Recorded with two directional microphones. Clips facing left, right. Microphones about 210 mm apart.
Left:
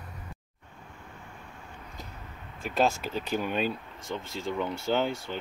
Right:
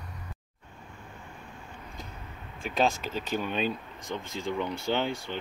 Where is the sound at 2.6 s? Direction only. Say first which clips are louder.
Left 1 dB; 5° left (ahead or behind).